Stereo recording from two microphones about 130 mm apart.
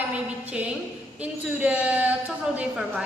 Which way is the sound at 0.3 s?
10° right (ahead or behind).